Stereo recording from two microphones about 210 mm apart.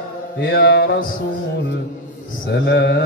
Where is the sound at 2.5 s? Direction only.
55° left (ahead or behind).